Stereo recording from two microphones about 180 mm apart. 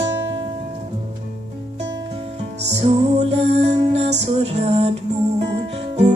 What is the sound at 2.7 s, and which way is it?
Music, 35° right (ahead or behind).